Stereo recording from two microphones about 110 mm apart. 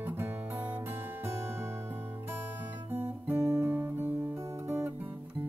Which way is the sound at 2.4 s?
20° right (ahead or behind).